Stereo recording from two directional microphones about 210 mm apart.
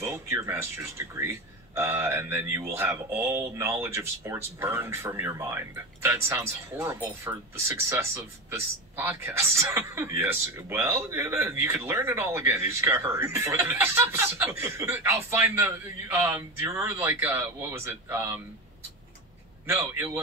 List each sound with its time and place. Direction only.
0.0 s speech: 15° right (ahead or behind)
19.6 s a man's voice: 10° right (ahead or behind)